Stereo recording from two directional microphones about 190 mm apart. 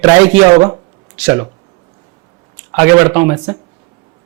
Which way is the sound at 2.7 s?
15° right (ahead or behind).